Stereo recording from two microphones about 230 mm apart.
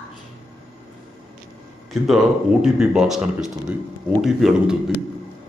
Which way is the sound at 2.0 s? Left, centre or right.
Centre.